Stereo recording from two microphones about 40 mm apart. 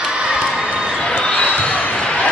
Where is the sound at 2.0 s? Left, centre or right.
Left.